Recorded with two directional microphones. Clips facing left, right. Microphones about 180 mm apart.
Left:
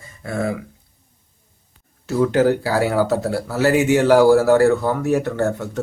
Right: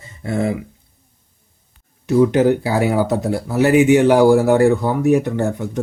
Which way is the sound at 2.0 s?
20° right (ahead or behind).